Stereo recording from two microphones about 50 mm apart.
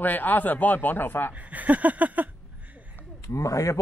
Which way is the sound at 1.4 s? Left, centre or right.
Right.